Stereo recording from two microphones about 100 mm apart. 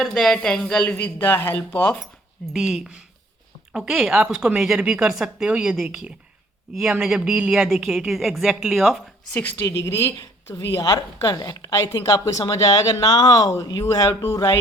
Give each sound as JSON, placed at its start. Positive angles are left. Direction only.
{"t": 0.0, "sound": "a woman's voice", "side_deg": 0}
{"t": 2.5, "sound": "a woman's voice", "side_deg": -5}
{"t": 9.3, "sound": "a woman's voice", "side_deg": 15}
{"t": 9.6, "sound": "a woman's voice", "side_deg": 30}